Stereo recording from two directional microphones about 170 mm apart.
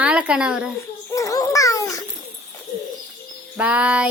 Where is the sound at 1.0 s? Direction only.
20° left (ahead or behind).